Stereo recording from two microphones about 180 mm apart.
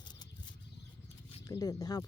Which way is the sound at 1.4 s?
20° left (ahead or behind).